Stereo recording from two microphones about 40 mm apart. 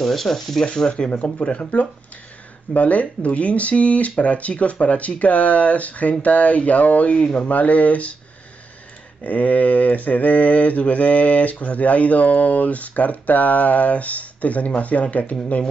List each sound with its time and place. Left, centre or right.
0.0 s speech: centre
0.7 s speech: left
2.7 s mantra: left
9.2 s mantra: left